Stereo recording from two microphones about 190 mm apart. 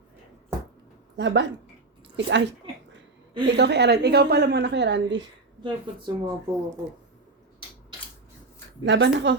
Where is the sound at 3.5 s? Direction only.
60° right (ahead or behind).